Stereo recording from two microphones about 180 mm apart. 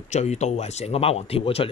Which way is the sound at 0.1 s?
40° left (ahead or behind).